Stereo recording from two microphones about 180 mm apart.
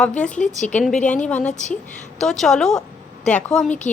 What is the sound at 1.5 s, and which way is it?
Speech, 40° left (ahead or behind).